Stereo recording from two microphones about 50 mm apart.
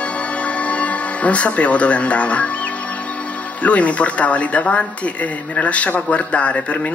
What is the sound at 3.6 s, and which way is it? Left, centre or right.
Speech, left.